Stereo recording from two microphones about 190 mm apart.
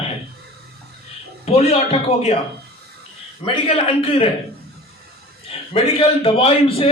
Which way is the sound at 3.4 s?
30° left (ahead or behind).